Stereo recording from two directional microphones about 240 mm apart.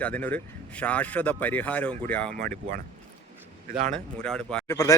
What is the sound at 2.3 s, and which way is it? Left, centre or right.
Speech, right.